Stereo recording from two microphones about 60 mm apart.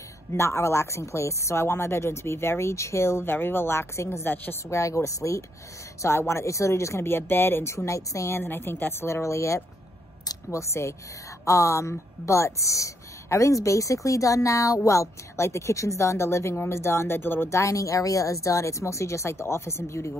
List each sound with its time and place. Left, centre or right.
0.3 s speech: left
6.0 s speech: left
8.4 s speech: left
9.0 s speech: left
17.5 s speech: left